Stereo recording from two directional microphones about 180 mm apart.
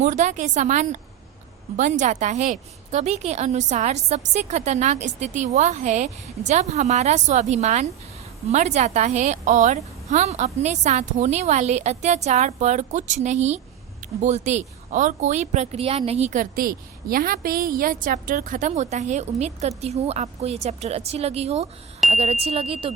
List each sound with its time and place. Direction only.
0.0 s a woman's voice: 40° right (ahead or behind)